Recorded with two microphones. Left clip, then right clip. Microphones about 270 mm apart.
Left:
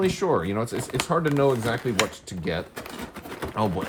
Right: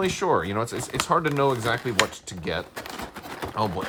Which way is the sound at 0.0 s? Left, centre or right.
Right.